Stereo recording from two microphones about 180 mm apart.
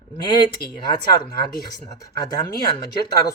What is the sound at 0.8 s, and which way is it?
Speech, 25° left (ahead or behind).